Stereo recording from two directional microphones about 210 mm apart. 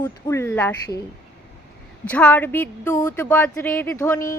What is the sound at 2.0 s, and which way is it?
Speech, 5° left (ahead or behind).